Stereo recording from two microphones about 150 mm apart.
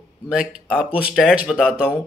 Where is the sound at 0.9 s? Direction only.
5° right (ahead or behind).